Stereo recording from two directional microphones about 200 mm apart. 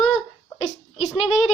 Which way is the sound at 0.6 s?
35° left (ahead or behind).